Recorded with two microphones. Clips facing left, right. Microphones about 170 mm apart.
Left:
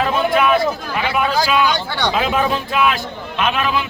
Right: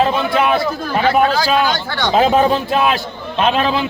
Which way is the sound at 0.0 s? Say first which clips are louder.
Right 1 dB; 30° right (ahead or behind).